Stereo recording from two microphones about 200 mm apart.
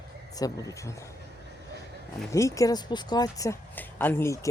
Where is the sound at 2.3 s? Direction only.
15° left (ahead or behind).